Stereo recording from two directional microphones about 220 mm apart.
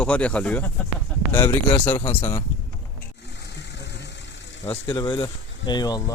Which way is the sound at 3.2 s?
50° left (ahead or behind).